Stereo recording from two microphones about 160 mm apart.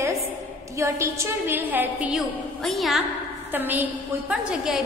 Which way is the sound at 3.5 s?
10° right (ahead or behind).